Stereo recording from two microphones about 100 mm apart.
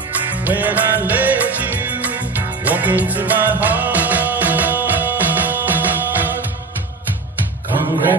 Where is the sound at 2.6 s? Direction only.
15° right (ahead or behind).